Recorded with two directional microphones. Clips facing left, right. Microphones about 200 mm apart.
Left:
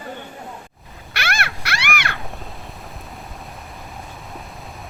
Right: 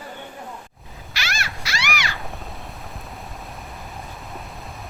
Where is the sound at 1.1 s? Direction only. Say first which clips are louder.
Left 5 dB; 55° left (ahead or behind).